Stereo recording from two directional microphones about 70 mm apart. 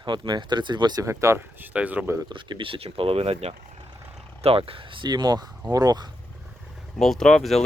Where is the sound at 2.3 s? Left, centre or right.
Right.